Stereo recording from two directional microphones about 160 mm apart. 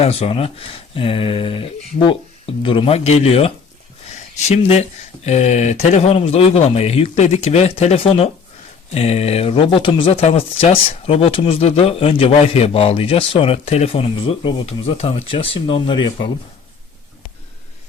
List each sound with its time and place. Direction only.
0.0 s speech: 40° left (ahead or behind)